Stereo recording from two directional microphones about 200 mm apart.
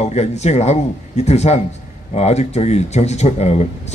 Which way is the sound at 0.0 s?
35° left (ahead or behind).